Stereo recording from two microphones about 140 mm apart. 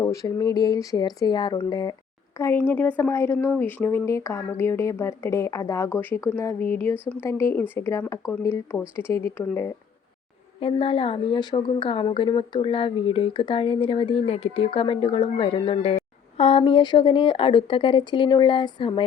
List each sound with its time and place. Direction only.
0.0 s speech: 25° left (ahead or behind)
2.4 s speech: 15° left (ahead or behind)
10.6 s a woman's voice: 40° left (ahead or behind)